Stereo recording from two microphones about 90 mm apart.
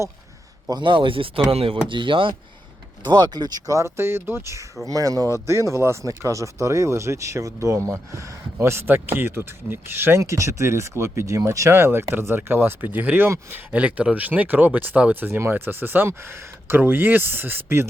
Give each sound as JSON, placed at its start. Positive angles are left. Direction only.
{"t": 0.7, "sound": "speech", "side_deg": -60}
{"t": 1.5, "sound": "speech", "side_deg": -90}
{"t": 3.0, "sound": "speech", "side_deg": -55}